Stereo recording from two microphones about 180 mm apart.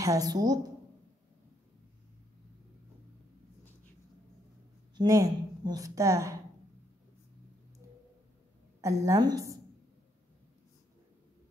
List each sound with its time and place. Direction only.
0.0 s a woman's voice: 20° right (ahead or behind)
4.9 s a woman's voice: 20° right (ahead or behind)
9.0 s a woman's voice: 20° right (ahead or behind)